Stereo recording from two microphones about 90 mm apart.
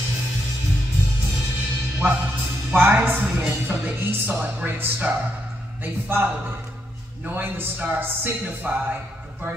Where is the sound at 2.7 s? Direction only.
15° right (ahead or behind).